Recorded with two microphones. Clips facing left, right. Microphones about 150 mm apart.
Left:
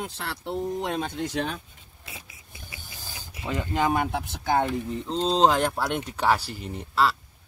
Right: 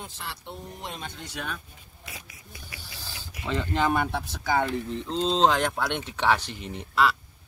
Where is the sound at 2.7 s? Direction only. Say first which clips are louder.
Even; 20° left (ahead or behind).